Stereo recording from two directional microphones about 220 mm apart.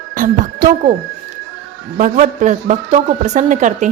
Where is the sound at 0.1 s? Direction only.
35° right (ahead or behind).